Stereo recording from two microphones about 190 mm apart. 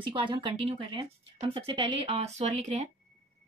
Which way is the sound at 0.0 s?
25° right (ahead or behind).